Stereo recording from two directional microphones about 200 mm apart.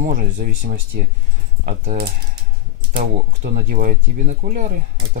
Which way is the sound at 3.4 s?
45° right (ahead or behind).